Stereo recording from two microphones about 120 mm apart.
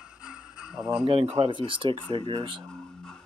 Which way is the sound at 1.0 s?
50° right (ahead or behind).